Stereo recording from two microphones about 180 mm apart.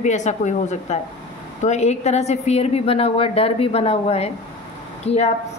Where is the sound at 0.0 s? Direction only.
40° left (ahead or behind).